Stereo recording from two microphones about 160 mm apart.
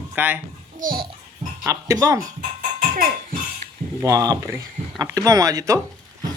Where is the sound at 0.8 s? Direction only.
60° right (ahead or behind).